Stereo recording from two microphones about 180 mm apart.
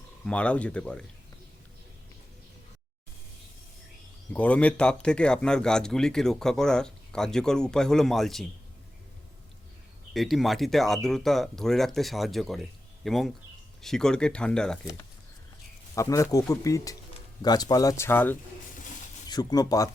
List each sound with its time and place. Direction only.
0.3 s speech: 5° left (ahead or behind)
4.3 s speech: 10° left (ahead or behind)
10.1 s speech: centre (ahead or behind)
16.0 s speech: 20° left (ahead or behind)
19.3 s speech: 20° left (ahead or behind)